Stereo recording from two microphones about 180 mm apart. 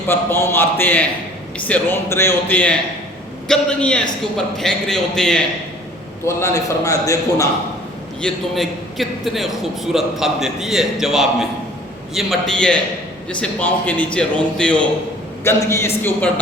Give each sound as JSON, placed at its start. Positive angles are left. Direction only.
{"t": 0.1, "sound": "a man's voice", "side_deg": 10}
{"t": 6.2, "sound": "speech", "side_deg": 15}
{"t": 8.2, "sound": "a man's voice", "side_deg": 0}